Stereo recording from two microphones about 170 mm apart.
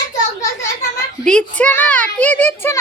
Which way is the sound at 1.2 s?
5° left (ahead or behind).